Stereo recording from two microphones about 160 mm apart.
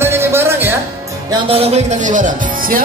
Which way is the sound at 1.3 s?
35° right (ahead or behind).